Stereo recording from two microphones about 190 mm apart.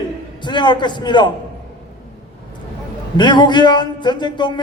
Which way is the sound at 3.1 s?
25° left (ahead or behind).